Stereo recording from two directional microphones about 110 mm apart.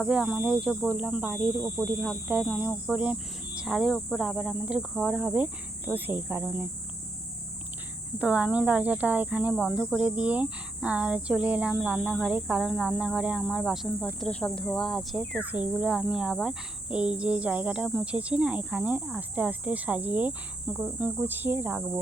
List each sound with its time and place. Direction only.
0.1 s speech: 10° right (ahead or behind)
8.2 s speech: 10° right (ahead or behind)
15.4 s speech: 15° right (ahead or behind)